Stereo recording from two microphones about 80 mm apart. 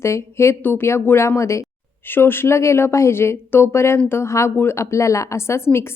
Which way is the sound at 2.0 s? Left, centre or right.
Left.